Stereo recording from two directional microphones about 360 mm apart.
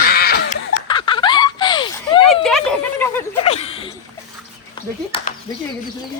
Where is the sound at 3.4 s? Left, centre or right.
Centre.